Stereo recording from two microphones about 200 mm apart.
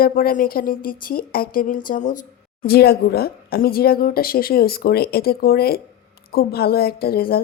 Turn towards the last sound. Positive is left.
turn(degrees=50)  # may be behind; listen again after turning